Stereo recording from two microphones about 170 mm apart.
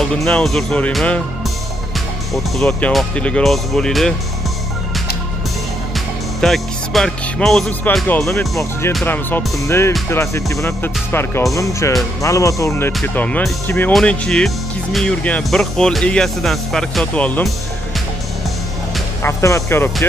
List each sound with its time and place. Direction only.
0.0 s speech: 5° left (ahead or behind)
2.3 s speech: centre (ahead or behind)
6.4 s speech: centre (ahead or behind)
8.4 s speech: 15° left (ahead or behind)
19.2 s speech: 15° left (ahead or behind)